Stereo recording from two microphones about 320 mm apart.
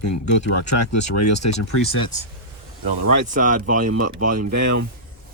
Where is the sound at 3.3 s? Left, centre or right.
Right.